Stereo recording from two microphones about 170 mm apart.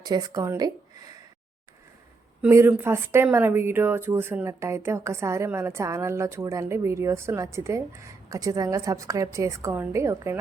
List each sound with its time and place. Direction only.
0.0 s speech: 20° right (ahead or behind)
2.4 s speech: 15° right (ahead or behind)